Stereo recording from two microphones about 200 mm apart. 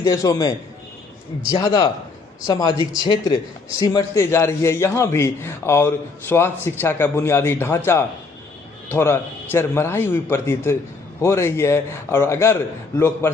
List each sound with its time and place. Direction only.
0.0 s a man's voice: 15° left (ahead or behind)